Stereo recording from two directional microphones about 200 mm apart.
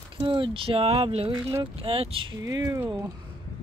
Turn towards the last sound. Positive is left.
turn(degrees=-15)  # may be behind; listen again after turning